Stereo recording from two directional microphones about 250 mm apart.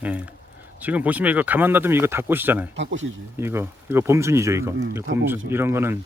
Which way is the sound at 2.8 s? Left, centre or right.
Right.